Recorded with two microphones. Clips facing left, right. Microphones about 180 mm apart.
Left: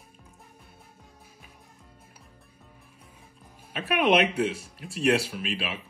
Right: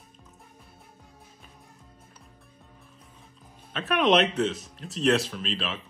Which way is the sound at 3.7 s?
10° left (ahead or behind).